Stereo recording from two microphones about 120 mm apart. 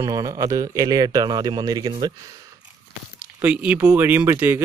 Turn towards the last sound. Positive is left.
turn(degrees=-20)  # may be behind; listen again after turning